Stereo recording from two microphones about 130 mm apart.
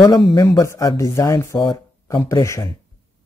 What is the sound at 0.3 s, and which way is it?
Speech, 25° left (ahead or behind).